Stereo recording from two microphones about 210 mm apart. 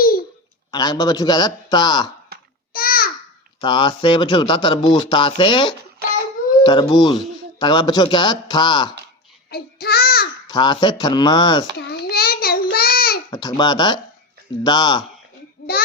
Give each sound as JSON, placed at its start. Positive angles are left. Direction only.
{"t": 0.7, "sound": "speech", "side_deg": 20}
{"t": 2.7, "sound": "babbling", "side_deg": 45}
{"t": 3.6, "sound": "speech", "side_deg": 20}
{"t": 9.5, "sound": "child singing", "side_deg": 50}
{"t": 10.5, "sound": "speech", "side_deg": 20}
{"t": 11.9, "sound": "a sound", "side_deg": 50}
{"t": 12.7, "sound": "child singing", "side_deg": 45}
{"t": 13.3, "sound": "speech", "side_deg": 20}